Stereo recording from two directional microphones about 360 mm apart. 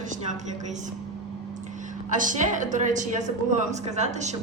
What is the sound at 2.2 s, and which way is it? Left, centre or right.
A woman's voice, right.